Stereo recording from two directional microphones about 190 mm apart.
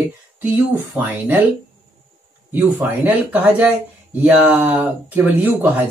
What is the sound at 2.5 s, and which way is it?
Speech, 10° right (ahead or behind).